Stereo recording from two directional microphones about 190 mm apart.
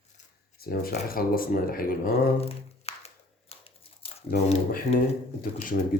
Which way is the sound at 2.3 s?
30° left (ahead or behind).